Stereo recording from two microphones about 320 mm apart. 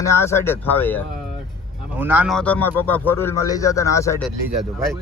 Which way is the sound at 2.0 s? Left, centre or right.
Centre.